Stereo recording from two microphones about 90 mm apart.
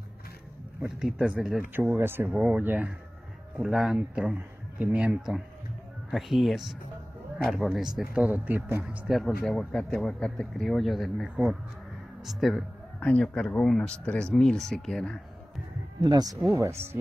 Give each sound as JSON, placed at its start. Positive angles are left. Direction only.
{"t": 0.9, "sound": "speech", "side_deg": -10}
{"t": 1.7, "sound": "speech", "side_deg": -20}
{"t": 2.3, "sound": "speech", "side_deg": -15}
{"t": 3.6, "sound": "speech", "side_deg": -5}
{"t": 8.3, "sound": "speech", "side_deg": -20}
{"t": 9.5, "sound": "speech", "side_deg": 5}
{"t": 11.2, "sound": "speech", "side_deg": -15}
{"t": 12.2, "sound": "speech", "side_deg": 0}
{"t": 13.0, "sound": "speech", "side_deg": 10}
{"t": 16.0, "sound": "speech", "side_deg": -45}
{"t": 16.5, "sound": "speech", "side_deg": -30}